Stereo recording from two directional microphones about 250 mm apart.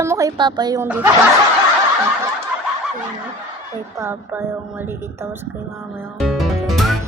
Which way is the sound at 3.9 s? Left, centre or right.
Centre.